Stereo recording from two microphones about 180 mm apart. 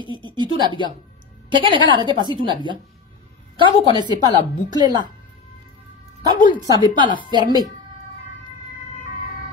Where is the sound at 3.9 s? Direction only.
25° right (ahead or behind).